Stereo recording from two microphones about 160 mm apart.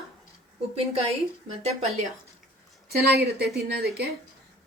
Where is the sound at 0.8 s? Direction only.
40° right (ahead or behind).